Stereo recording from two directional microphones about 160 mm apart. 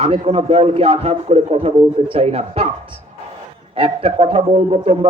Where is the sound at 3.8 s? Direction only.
40° right (ahead or behind).